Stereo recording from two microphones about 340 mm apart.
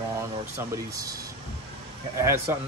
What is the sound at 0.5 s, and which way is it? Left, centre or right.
Speech, centre.